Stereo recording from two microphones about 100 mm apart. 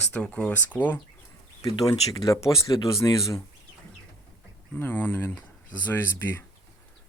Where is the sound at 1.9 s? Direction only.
35° left (ahead or behind).